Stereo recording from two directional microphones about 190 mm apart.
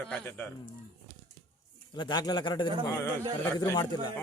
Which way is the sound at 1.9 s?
20° left (ahead or behind).